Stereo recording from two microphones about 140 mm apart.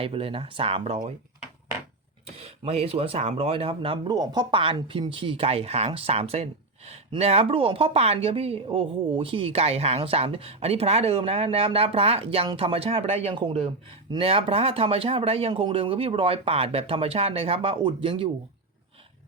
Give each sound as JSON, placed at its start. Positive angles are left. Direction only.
{"t": 0.0, "sound": "speech", "side_deg": -40}
{"t": 2.4, "sound": "a woman's voice", "side_deg": -45}
{"t": 4.1, "sound": "a woman's voice", "side_deg": -30}